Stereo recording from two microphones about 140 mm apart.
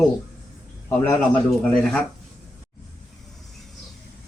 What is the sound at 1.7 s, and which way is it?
Speech, 5° left (ahead or behind).